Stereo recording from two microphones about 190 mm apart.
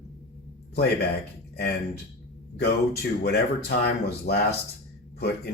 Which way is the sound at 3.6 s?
60° left (ahead or behind).